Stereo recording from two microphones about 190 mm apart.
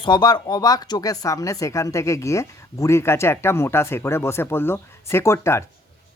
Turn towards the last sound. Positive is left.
turn(degrees=15)  # may be behind; listen again after turning